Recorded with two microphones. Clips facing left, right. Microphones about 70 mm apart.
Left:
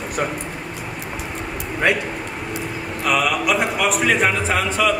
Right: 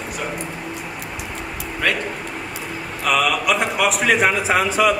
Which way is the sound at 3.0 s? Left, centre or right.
Centre.